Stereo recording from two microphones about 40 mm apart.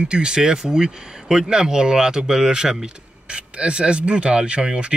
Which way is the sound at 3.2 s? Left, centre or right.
Right.